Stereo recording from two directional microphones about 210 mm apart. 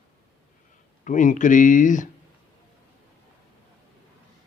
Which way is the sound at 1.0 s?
35° left (ahead or behind).